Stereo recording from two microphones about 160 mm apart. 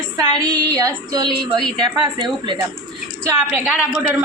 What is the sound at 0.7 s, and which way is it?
Speech, 20° right (ahead or behind).